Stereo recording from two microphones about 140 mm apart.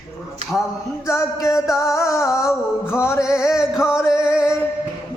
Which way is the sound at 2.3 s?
5° right (ahead or behind).